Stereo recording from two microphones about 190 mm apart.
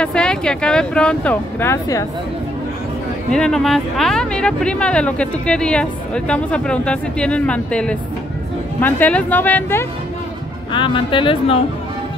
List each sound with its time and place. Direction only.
0.0 s speech: 5° left (ahead or behind)
3.3 s speech: 5° left (ahead or behind)
10.7 s speech: 25° left (ahead or behind)